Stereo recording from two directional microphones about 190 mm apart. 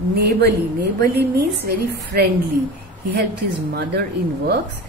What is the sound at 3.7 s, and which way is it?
Speech, 55° right (ahead or behind).